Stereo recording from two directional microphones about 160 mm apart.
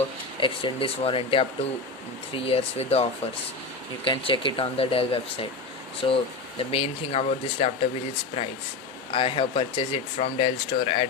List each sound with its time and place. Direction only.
0.3 s speech: 30° left (ahead or behind)
9.1 s speech: 35° left (ahead or behind)